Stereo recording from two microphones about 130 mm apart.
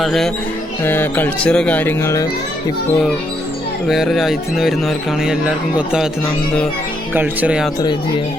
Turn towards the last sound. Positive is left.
turn(degrees=-10)  # may be behind; listen again after turning